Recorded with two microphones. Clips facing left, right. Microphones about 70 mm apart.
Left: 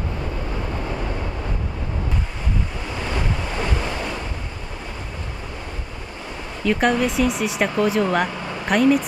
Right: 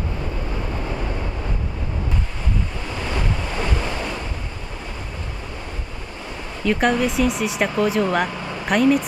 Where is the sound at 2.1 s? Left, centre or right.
Centre.